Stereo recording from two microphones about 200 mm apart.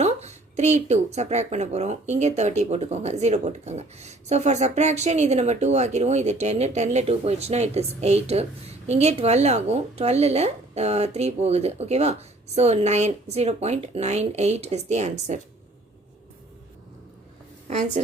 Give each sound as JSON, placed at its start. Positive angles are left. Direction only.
{"t": 0.0, "sound": "speech", "side_deg": -35}
{"t": 17.7, "sound": "speech", "side_deg": -35}